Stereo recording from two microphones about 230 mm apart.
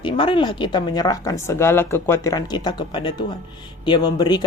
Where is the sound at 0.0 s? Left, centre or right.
Left.